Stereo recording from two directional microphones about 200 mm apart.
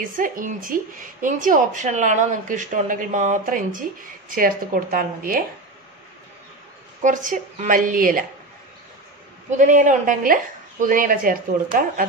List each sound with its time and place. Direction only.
0.0 s a woman's voice: 40° right (ahead or behind)
7.0 s a woman's voice: 40° right (ahead or behind)
9.5 s speech: 40° right (ahead or behind)